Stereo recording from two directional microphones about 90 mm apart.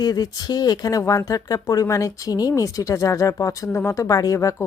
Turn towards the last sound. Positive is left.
turn(degrees=35)  # may be behind; listen again after turning